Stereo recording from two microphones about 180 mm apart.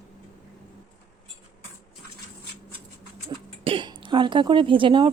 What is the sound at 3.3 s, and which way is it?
Throat clearing, 25° right (ahead or behind).